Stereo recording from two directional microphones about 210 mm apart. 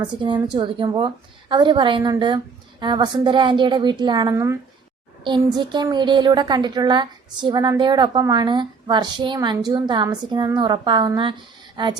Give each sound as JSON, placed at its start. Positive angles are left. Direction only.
{"t": 0.0, "sound": "a woman's voice", "side_deg": -20}